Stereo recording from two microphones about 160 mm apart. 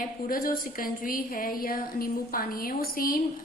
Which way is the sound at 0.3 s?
65° left (ahead or behind).